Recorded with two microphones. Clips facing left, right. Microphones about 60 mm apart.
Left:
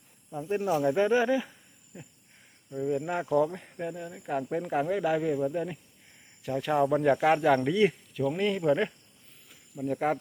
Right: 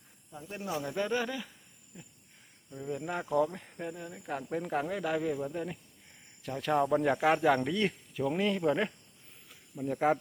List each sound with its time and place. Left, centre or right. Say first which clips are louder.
0.3 s speech: left 10 dB; left
2.6 s speech: left 7 dB; centre
8.1 s speech: left 2 dB; centre